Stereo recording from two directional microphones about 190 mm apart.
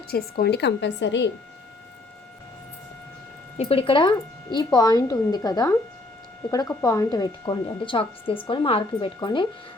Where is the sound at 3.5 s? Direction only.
35° left (ahead or behind).